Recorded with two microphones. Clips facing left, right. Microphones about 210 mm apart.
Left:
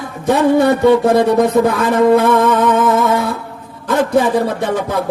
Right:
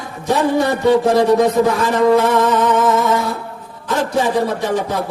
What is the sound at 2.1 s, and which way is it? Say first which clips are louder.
Music: left 2 dB; 55° left (ahead or behind).